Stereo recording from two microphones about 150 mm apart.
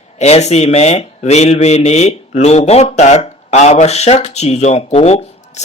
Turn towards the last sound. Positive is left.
turn(degrees=45)  # may be behind; listen again after turning